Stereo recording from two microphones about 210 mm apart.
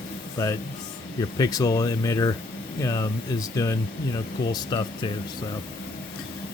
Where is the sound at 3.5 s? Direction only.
15° left (ahead or behind).